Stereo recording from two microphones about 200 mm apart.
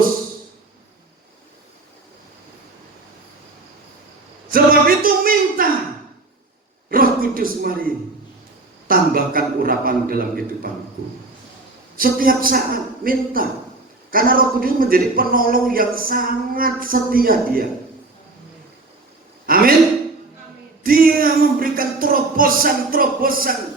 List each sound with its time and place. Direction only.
4.5 s speech: 45° right (ahead or behind)
6.9 s a man's voice: 45° right (ahead or behind)
11.9 s speech: 45° right (ahead or behind)
19.5 s a sound: 45° right (ahead or behind)
20.8 s music: 45° right (ahead or behind)